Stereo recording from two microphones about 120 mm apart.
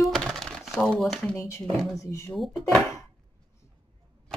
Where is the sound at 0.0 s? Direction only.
Centre (ahead or behind).